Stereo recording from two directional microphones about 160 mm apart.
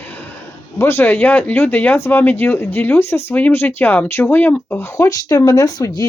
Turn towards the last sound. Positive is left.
turn(degrees=20)  # may be behind; listen again after turning